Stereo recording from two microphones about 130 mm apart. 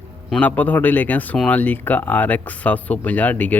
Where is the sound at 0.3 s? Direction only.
10° left (ahead or behind).